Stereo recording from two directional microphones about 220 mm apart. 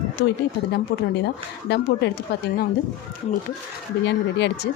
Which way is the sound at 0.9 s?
50° left (ahead or behind).